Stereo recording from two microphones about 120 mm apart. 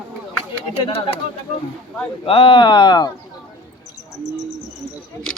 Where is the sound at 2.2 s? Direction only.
50° left (ahead or behind).